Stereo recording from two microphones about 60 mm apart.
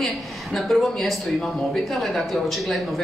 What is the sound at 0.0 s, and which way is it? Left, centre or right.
A woman's voice, centre.